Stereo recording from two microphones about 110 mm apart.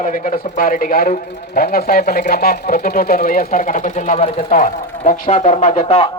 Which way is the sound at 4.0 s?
80° left.